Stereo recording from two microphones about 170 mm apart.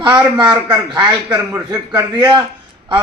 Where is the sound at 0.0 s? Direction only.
25° right (ahead or behind).